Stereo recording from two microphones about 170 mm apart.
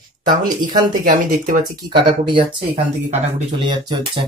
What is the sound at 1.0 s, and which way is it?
Speech, 50° right (ahead or behind).